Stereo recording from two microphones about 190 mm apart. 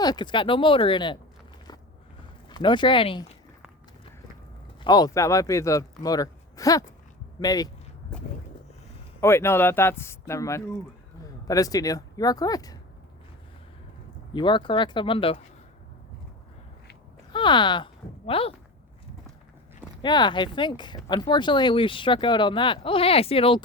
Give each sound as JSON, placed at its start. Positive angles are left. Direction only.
{"t": 0.0, "sound": "speech", "side_deg": 20}
{"t": 2.5, "sound": "speech", "side_deg": 25}
{"t": 4.8, "sound": "a man's voice", "side_deg": 20}
{"t": 9.2, "sound": "a man's voice", "side_deg": 15}
{"t": 14.3, "sound": "speech", "side_deg": 25}
{"t": 17.3, "sound": "speech", "side_deg": 25}
{"t": 20.0, "sound": "speech", "side_deg": 25}